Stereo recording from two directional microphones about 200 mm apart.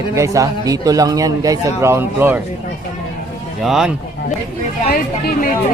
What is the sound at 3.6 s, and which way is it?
Speech, centre (ahead or behind).